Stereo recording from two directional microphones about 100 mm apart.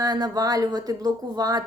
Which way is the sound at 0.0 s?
40° right (ahead or behind).